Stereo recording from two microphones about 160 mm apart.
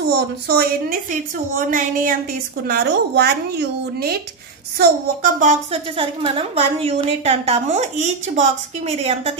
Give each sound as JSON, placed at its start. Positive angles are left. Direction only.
{"t": 0.5, "sound": "a woman's voice", "side_deg": -70}
{"t": 1.5, "sound": "speech", "side_deg": -55}
{"t": 2.6, "sound": "a woman's voice", "side_deg": -85}
{"t": 5.4, "sound": "speech", "side_deg": -50}
{"t": 5.9, "sound": "a woman's voice", "side_deg": -35}